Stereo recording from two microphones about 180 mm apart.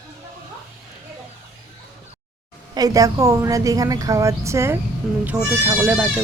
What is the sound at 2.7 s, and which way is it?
A woman's voice, 20° right (ahead or behind).